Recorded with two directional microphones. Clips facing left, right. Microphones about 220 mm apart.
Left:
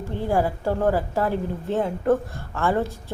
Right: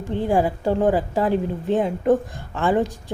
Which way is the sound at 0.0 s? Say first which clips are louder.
Right 3 dB; 15° right (ahead or behind).